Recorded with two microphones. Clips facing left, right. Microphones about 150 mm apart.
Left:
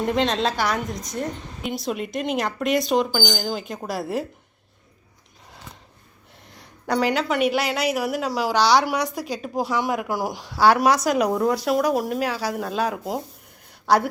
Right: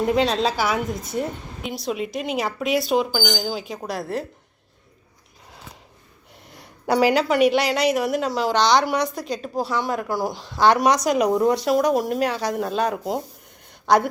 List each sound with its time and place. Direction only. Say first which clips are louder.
0.0 s a woman's voice: right 2 dB; 5° right (ahead or behind)
6.8 s a woman's voice: right 4 dB; 5° right (ahead or behind)